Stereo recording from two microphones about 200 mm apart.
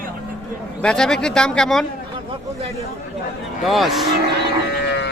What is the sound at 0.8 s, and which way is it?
A man's voice, 5° left (ahead or behind).